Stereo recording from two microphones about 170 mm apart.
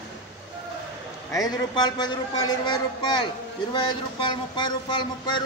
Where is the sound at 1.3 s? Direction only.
20° left (ahead or behind).